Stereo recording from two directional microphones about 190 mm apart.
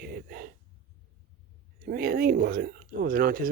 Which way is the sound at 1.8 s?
50° right (ahead or behind).